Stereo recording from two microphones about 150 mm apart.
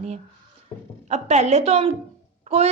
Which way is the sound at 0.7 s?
20° left (ahead or behind).